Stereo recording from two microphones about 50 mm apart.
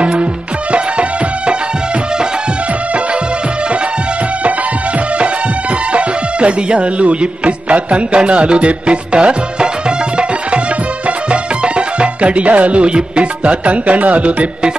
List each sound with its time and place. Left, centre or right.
0.0 s music: right
5.2 s music: right